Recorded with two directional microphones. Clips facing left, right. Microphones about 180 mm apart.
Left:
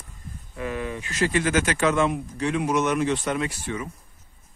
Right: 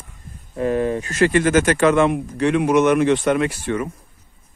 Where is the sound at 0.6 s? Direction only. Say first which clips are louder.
Right 10 dB; 45° right (ahead or behind); by 3.9 s 65° right (ahead or behind).